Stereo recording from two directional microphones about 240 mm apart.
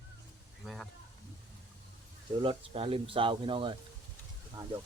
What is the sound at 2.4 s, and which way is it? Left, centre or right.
Speech, right.